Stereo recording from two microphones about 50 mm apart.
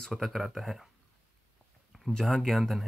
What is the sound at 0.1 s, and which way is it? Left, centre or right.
Speech, centre.